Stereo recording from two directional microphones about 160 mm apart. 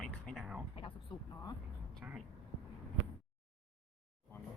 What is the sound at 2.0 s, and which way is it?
Speech, 10° right (ahead or behind).